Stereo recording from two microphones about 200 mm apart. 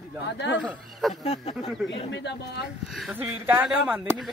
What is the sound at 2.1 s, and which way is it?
Speech, 60° left (ahead or behind).